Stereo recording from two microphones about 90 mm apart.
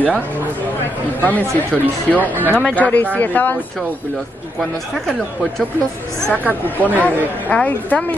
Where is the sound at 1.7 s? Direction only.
Centre (ahead or behind).